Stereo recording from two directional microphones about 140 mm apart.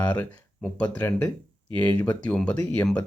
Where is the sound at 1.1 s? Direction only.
20° left (ahead or behind).